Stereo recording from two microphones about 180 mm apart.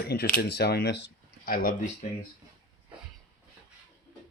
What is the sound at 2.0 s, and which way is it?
Speech, 45° left (ahead or behind).